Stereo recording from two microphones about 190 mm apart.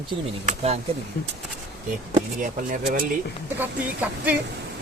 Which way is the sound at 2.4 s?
45° right (ahead or behind).